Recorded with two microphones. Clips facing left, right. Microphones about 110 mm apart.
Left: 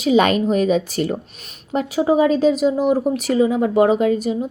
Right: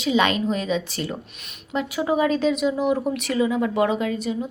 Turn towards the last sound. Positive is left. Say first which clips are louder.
# left 7 dB
turn(degrees=40)  # may be behind; listen again after turning